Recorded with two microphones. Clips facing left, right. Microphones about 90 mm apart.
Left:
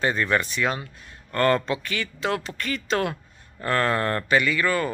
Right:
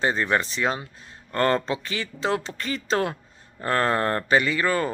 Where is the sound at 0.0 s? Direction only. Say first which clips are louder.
Even; 25° right (ahead or behind).